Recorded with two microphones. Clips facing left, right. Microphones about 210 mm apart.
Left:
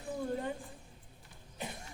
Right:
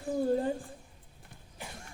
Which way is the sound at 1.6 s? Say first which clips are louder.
Left 4 dB; 20° left (ahead or behind).